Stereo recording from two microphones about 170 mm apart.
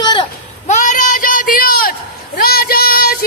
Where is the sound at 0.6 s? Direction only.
45° left (ahead or behind); by 3.2 s 60° left (ahead or behind).